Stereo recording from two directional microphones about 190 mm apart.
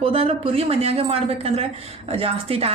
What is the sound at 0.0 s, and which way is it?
Speech, 30° right (ahead or behind).